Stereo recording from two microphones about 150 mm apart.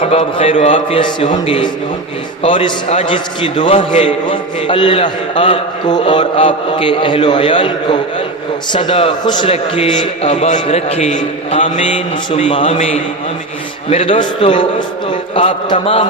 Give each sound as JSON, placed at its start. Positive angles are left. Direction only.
{"t": 0.0, "sound": "a man's voice", "side_deg": 40}
{"t": 9.5, "sound": "a man's voice", "side_deg": 40}
{"t": 13.9, "sound": "a man's voice", "side_deg": 40}